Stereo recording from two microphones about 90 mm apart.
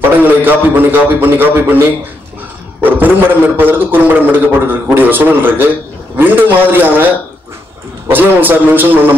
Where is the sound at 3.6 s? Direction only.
20° right (ahead or behind).